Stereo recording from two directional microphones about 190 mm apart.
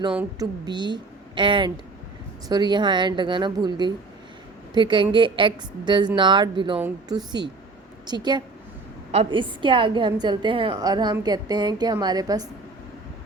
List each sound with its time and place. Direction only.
0.3 s a woman's voice: 20° right (ahead or behind)